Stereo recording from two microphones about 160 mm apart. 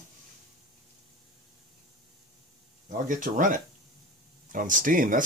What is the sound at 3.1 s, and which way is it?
Speech, 55° right (ahead or behind).